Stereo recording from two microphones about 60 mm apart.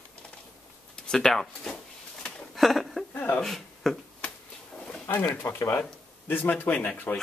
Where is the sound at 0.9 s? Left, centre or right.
Centre.